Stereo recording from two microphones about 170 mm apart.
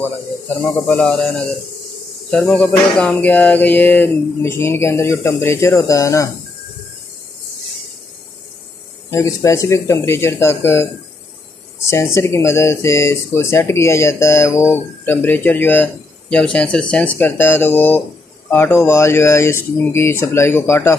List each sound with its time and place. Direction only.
0.7 s speech: 10° left (ahead or behind)
9.1 s speech: 20° left (ahead or behind)
11.9 s speech: 15° left (ahead or behind)